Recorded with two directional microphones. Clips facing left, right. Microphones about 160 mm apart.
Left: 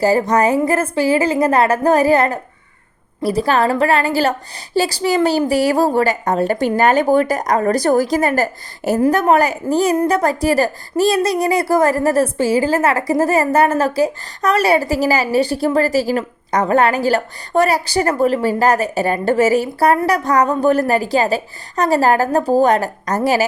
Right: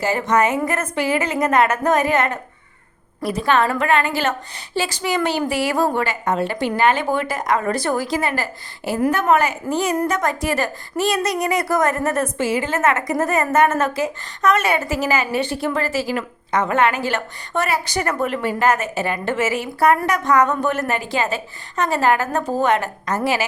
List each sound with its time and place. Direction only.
0.0 s speech: 35° left (ahead or behind)